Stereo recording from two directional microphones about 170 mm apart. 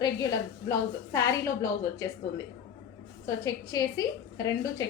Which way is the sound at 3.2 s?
20° left (ahead or behind).